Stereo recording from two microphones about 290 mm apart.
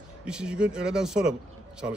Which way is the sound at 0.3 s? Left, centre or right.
Centre.